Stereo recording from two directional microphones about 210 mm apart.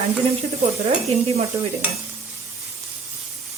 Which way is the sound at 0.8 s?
30° right (ahead or behind).